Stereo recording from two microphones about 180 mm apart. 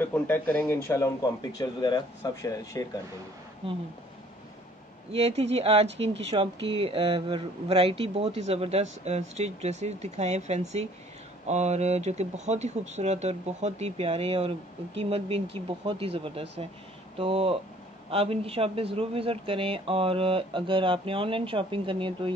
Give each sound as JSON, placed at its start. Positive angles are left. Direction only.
{"t": 0.0, "sound": "speech", "side_deg": 10}
{"t": 5.1, "sound": "speech", "side_deg": -35}